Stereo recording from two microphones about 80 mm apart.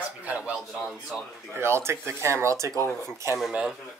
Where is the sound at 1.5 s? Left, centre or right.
Right.